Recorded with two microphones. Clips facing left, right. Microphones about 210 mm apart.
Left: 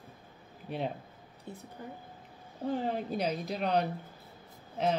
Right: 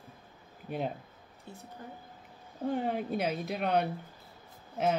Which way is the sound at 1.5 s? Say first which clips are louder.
Left 3 dB; 20° left (ahead or behind).